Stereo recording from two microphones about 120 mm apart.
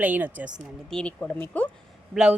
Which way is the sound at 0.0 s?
15° right (ahead or behind).